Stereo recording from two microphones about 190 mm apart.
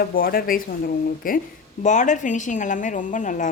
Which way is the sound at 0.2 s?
50° left (ahead or behind).